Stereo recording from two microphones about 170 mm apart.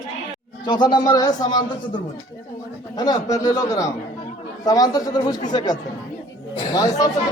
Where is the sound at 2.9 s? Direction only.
20° left (ahead or behind).